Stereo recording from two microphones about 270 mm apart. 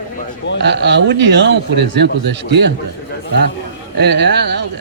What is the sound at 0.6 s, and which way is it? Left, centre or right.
Speech, right.